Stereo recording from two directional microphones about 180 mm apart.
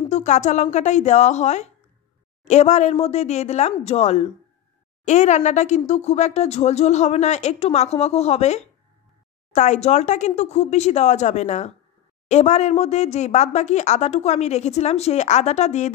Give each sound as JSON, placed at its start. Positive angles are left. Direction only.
{"t": 0.1, "sound": "speech", "side_deg": 40}